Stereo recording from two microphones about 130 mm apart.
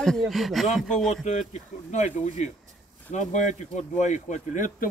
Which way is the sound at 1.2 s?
65° left (ahead or behind).